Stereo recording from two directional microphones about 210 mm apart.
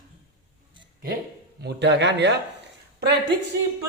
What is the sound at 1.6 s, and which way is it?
Speech, 55° right (ahead or behind).